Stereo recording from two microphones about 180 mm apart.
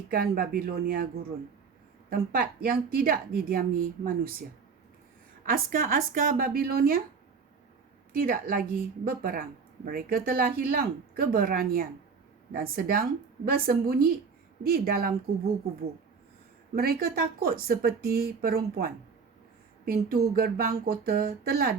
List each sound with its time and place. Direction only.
0.1 s a woman's voice: 55° right (ahead or behind)
5.5 s speech: 50° right (ahead or behind)
8.1 s a woman's voice: 55° right (ahead or behind)
16.7 s a woman's voice: 55° right (ahead or behind)